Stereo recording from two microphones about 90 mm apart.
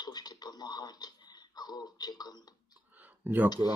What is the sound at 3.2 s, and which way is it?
Speech, 20° right (ahead or behind).